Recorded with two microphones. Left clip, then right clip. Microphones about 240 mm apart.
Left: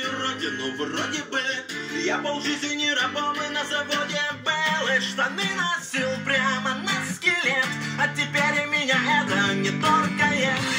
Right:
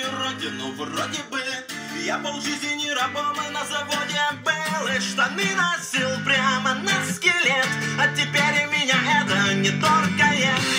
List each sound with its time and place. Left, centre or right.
2.0 s music: right
4.5 s music: right